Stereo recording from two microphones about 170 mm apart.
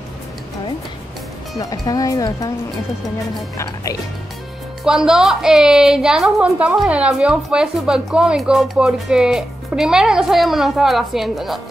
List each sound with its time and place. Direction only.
1.6 s speech: 20° left (ahead or behind)
3.5 s speech: 20° left (ahead or behind)
4.8 s a woman's voice: 5° right (ahead or behind)